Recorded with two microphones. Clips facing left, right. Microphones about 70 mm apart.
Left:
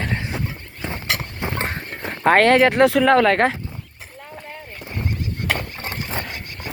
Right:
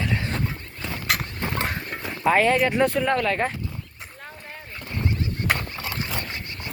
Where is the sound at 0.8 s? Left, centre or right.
Left.